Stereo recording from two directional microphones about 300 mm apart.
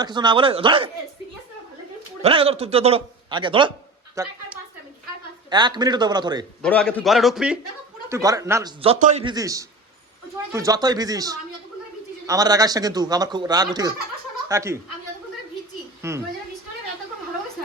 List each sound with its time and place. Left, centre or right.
0.0 s a man's voice: centre
2.2 s a man's voice: centre
5.5 s a man's voice: centre
6.6 s a man's voice: centre
16.0 s a child's voice: centre